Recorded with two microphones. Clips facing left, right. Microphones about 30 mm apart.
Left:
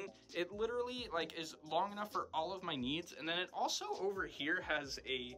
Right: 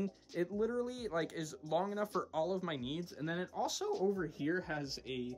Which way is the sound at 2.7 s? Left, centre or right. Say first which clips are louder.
Even; centre.